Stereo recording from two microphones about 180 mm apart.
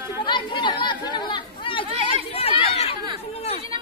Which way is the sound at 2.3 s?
35° left (ahead or behind).